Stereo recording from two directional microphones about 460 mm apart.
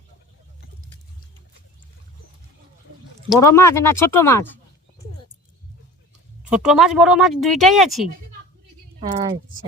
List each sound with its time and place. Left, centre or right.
3.2 s speech: centre
6.4 s speech: centre
9.0 s speech: centre